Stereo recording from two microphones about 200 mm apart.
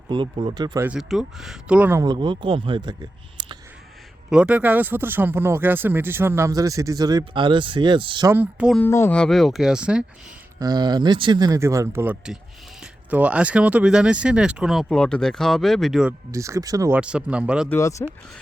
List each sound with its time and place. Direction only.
0.1 s speech: 25° right (ahead or behind)
0.9 s speech: centre (ahead or behind); by 3.6 s 20° right (ahead or behind)
4.3 s speech: 5° right (ahead or behind); by 8.3 s 25° right (ahead or behind)
8.3 s speech: 10° right (ahead or behind)
8.8 s speech: 10° left (ahead or behind); by 10.1 s 5° right (ahead or behind)
10.6 s speech: 20° right (ahead or behind); by 16.1 s centre (ahead or behind)
16.3 s speech: 15° right (ahead or behind)
17.7 s speech: 15° left (ahead or behind)